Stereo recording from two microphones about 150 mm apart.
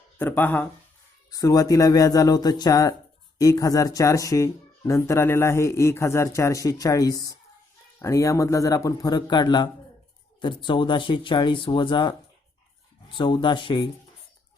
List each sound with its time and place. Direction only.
0.2 s speech: 10° left (ahead or behind)
1.3 s speech: 25° left (ahead or behind)